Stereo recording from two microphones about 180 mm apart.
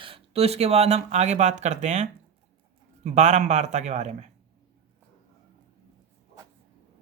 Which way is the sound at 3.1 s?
40° right (ahead or behind).